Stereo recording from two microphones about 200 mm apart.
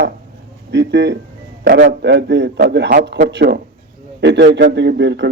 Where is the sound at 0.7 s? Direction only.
60° right (ahead or behind).